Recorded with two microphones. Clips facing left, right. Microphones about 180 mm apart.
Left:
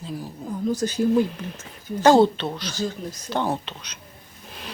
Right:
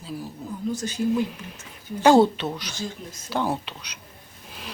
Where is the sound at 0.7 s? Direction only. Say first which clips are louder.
Left 5 dB; 40° left (ahead or behind).